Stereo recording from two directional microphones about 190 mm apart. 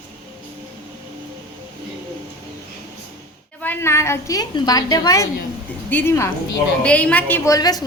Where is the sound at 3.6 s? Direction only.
10° left (ahead or behind).